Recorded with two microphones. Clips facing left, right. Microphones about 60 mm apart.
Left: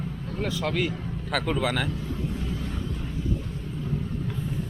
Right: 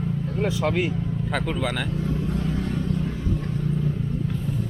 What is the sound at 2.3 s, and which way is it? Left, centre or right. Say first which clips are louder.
Vehicle: right 6 dB; right.